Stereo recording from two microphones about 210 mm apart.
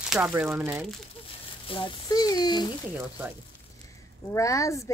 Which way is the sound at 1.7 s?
25° left (ahead or behind).